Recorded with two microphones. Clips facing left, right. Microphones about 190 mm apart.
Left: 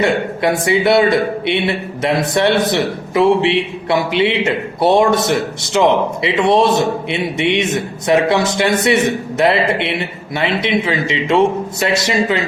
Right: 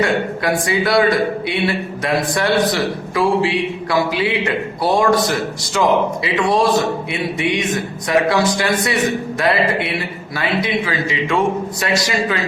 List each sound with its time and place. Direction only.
0.0 s a man's voice: 25° left (ahead or behind)